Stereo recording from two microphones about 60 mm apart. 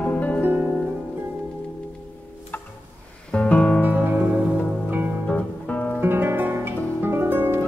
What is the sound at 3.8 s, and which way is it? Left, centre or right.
Music, right.